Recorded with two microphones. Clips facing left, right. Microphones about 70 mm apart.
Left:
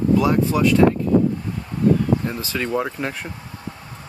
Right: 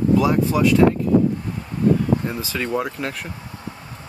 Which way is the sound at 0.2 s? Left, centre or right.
Centre.